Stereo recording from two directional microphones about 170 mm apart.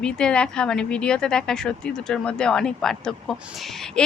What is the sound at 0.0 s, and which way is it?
Speech, 5° left (ahead or behind).